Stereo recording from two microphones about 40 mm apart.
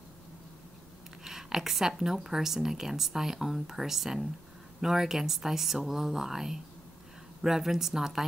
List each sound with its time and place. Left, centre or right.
1.2 s speech: centre